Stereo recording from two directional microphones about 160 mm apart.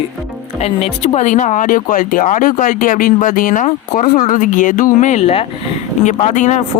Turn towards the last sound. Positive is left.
turn(degrees=50)  # may be behind; listen again after turning